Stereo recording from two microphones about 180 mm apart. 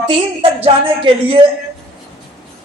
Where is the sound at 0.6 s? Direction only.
30° right (ahead or behind).